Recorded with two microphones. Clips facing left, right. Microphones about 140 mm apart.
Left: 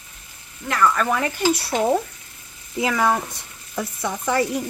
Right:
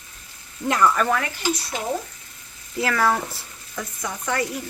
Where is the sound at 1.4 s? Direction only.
65° left (ahead or behind).